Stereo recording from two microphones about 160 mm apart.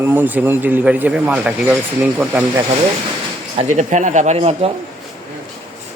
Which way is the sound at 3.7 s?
50° right (ahead or behind).